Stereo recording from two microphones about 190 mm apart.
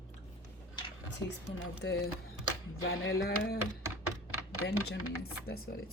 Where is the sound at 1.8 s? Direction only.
75° left (ahead or behind).